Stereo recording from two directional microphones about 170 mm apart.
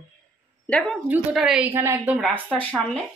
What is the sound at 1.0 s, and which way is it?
Speech, 5° right (ahead or behind).